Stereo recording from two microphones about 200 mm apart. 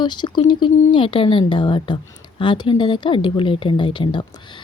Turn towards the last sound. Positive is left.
turn(degrees=25)  # may be behind; listen again after turning